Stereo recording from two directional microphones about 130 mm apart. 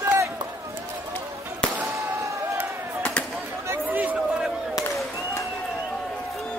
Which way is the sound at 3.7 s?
10° right (ahead or behind).